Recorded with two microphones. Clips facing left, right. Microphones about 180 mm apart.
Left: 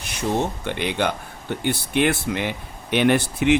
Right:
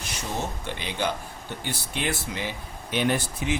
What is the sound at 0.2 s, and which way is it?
Speech, 65° left (ahead or behind).